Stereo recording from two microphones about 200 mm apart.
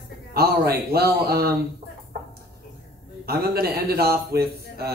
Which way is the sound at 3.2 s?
50° right (ahead or behind).